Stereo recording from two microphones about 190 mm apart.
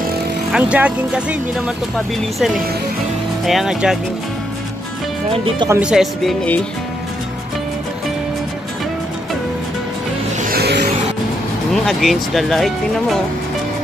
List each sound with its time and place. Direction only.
0.5 s speech: 5° right (ahead or behind)
3.4 s speech: centre (ahead or behind)
5.3 s speech: 30° right (ahead or behind)
5.7 s speech: 5° right (ahead or behind)
10.5 s music: 55° right (ahead or behind)
11.7 s speech: centre (ahead or behind)